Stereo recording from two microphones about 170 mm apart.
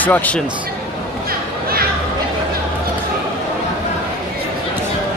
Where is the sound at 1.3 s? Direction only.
60° right (ahead or behind).